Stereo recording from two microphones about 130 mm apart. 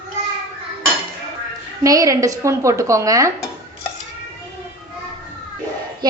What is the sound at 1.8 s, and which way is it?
A woman's voice, 25° right (ahead or behind).